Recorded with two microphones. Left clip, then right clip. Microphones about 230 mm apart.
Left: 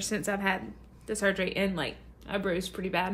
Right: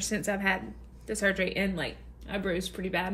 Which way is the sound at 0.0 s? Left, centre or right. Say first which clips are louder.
Right 1 dB; centre.